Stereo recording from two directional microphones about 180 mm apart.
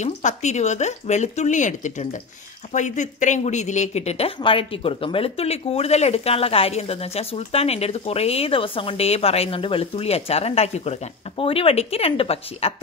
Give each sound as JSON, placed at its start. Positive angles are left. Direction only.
{"t": 0.0, "sound": "speech", "side_deg": 40}